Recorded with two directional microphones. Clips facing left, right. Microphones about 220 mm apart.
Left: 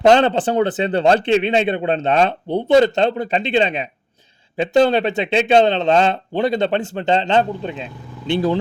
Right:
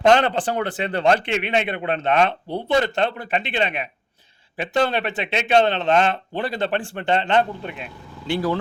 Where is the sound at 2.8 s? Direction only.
25° left (ahead or behind).